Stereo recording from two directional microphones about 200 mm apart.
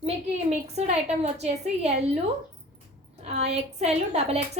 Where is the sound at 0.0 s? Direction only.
35° right (ahead or behind).